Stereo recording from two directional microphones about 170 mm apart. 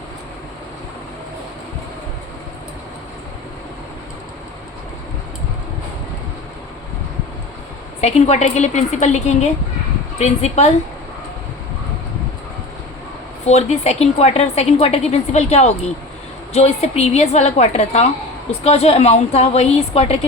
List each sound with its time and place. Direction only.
8.0 s a woman's voice: 40° left (ahead or behind)
13.4 s a woman's voice: 40° left (ahead or behind)